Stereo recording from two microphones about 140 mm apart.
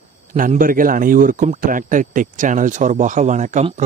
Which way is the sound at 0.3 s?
70° right (ahead or behind).